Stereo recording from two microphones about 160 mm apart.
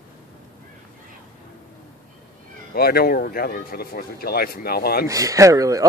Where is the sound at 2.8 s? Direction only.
75° left (ahead or behind).